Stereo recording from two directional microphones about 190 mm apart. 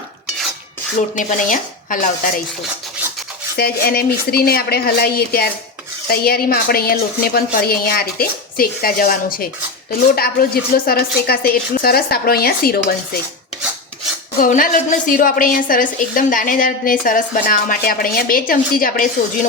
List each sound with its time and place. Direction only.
1.1 s a woman's voice: 40° left (ahead or behind)
3.5 s a woman's voice: 55° left (ahead or behind)
14.3 s a woman's voice: 45° left (ahead or behind)